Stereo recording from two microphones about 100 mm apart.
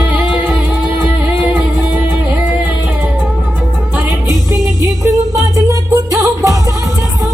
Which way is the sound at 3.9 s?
30° right (ahead or behind).